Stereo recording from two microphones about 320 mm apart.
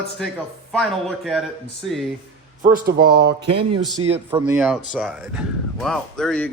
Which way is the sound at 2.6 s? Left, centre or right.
Right.